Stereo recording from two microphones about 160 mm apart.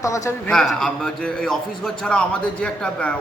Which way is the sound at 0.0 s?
20° left (ahead or behind).